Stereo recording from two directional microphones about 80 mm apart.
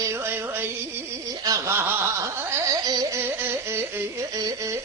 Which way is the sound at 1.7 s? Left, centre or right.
Right.